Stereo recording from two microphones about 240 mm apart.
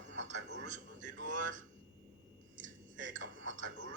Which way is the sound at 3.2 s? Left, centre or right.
Right.